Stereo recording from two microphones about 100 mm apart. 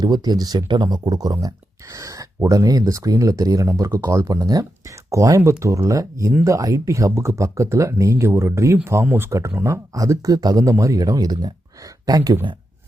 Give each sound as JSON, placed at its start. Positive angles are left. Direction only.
{"t": 0.0, "sound": "speech", "side_deg": -45}